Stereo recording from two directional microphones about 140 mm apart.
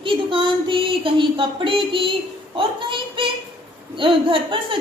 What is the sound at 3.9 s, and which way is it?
Speech, 35° right (ahead or behind).